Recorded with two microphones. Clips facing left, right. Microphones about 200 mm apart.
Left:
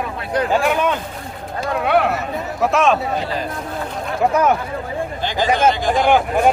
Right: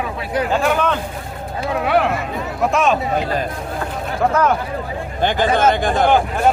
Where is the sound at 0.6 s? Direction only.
10° left (ahead or behind).